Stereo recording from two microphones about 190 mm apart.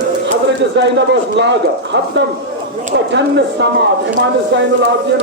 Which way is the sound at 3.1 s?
65° right (ahead or behind).